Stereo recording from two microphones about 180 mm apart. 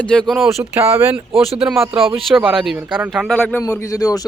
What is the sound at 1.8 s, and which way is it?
Speech, 30° right (ahead or behind).